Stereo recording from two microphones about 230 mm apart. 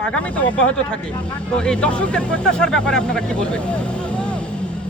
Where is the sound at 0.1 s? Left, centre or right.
Centre.